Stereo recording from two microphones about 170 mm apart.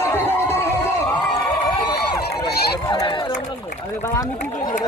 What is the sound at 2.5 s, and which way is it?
Run, 70° left (ahead or behind).